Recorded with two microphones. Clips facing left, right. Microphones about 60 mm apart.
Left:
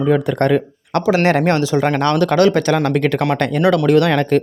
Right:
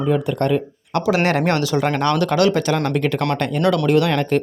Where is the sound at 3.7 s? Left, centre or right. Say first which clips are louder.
Left 4 dB; left.